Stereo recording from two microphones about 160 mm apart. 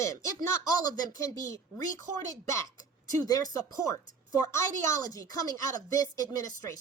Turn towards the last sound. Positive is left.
turn(degrees=20)  # may be behind; listen again after turning